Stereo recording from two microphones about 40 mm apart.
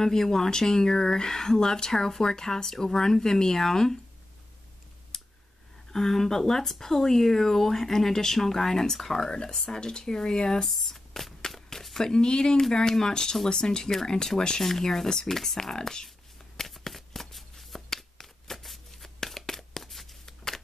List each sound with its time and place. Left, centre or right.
0.0 s speech: centre
5.1 s clicking: centre
5.9 s speech: centre
9.3 s speech: left
10.7 s a sound: centre
12.1 s speech: centre
16.5 s shuffling cards: centre
19.1 s a sound: centre